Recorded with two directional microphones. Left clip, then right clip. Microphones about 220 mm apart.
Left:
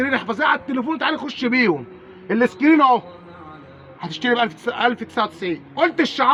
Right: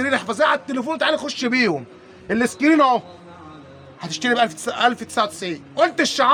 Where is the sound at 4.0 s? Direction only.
25° right (ahead or behind).